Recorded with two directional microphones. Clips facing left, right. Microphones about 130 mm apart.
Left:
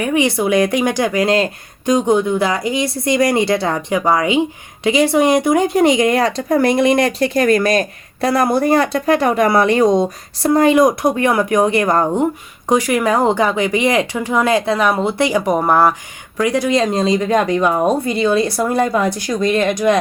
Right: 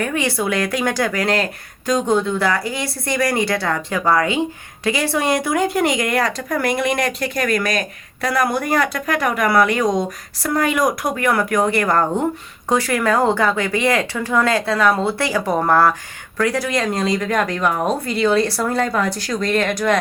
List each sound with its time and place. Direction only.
0.0 s speech: 15° left (ahead or behind)